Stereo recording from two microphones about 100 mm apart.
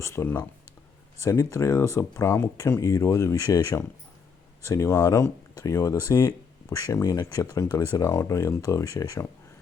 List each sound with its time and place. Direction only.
0.0 s speech: 25° left (ahead or behind)